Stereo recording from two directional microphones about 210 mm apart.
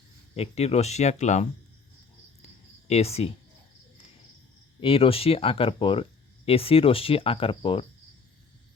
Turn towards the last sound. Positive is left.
turn(degrees=25)  # may be behind; listen again after turning